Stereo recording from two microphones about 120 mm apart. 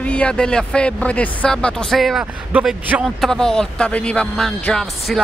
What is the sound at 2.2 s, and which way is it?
Speech, 15° right (ahead or behind).